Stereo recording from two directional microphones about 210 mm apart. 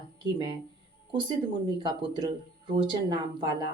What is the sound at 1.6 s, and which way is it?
Speech, 20° right (ahead or behind).